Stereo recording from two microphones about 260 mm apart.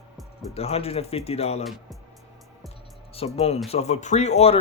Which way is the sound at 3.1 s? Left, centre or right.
Left.